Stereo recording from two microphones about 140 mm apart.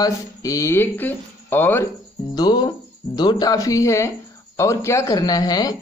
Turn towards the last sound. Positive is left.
turn(degrees=25)  # may be behind; listen again after turning